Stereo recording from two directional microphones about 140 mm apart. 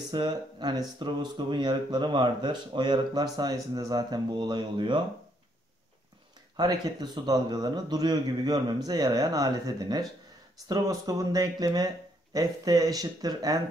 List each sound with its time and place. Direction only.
0.1 s a man's voice: 35° right (ahead or behind)
6.5 s a man's voice: 30° right (ahead or behind)